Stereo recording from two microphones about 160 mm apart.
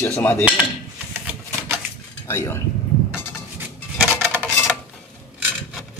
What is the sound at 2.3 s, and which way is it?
Speech, 15° left (ahead or behind).